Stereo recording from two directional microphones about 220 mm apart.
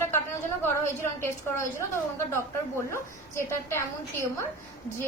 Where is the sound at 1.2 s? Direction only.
10° left (ahead or behind).